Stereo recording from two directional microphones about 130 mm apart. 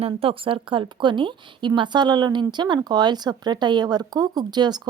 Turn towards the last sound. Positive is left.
turn(degrees=-35)  # may be behind; listen again after turning